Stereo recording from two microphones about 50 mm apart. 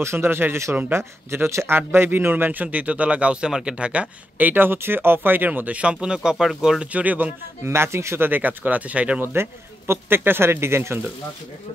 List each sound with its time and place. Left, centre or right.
0.0 s a man's voice: right
1.8 s speech: right
4.4 s speech: right; by 6.9 s centre
6.9 s speech: right
7.6 s a man's voice: right
8.3 s speech: right
9.2 s a man's voice: right